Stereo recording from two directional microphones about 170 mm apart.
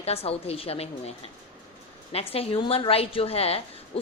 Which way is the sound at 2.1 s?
35° left (ahead or behind).